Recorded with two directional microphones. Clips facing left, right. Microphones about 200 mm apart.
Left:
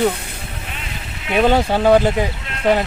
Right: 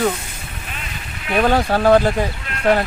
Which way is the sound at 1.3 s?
20° left (ahead or behind).